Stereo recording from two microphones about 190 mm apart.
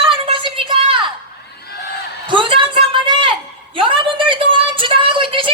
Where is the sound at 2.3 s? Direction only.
25° right (ahead or behind).